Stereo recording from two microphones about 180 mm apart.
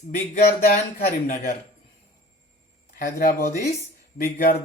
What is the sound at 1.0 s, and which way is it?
Speech, 50° left (ahead or behind).